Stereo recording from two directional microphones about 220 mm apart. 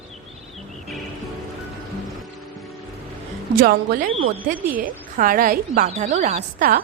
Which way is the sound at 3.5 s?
40° right (ahead or behind).